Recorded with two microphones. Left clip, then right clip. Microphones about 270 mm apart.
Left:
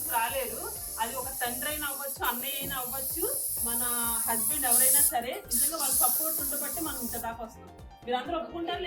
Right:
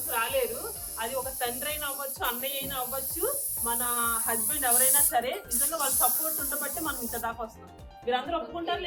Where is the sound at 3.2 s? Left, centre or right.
Centre.